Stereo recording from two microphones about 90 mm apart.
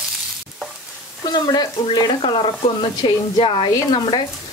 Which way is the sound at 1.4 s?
50° left (ahead or behind).